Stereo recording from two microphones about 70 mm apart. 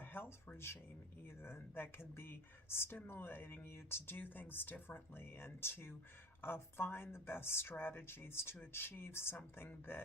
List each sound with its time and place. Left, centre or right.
0.0 s speech: left